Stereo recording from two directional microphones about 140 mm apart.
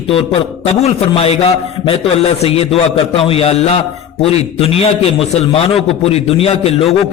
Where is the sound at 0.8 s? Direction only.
45° left (ahead or behind).